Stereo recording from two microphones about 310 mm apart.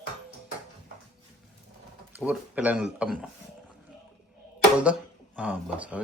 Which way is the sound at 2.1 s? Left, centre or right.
Centre.